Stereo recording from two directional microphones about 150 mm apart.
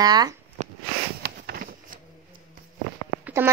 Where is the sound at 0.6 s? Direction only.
50° right (ahead or behind).